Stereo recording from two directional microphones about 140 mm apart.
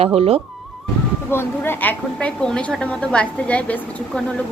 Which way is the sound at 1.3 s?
15° left (ahead or behind).